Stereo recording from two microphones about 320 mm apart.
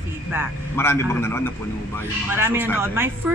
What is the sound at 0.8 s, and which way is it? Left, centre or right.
Speech, centre.